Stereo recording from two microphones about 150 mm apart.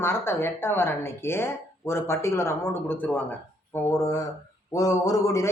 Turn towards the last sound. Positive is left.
turn(degrees=20)  # may be behind; listen again after turning